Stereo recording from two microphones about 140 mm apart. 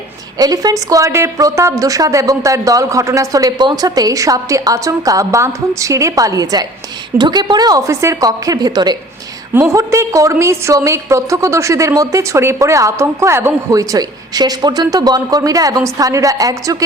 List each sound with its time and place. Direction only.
0.3 s a woman's voice: 25° right (ahead or behind)